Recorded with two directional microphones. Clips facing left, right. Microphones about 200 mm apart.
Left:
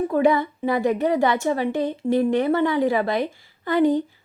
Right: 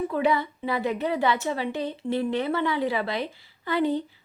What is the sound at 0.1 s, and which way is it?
A woman's voice, 50° left (ahead or behind).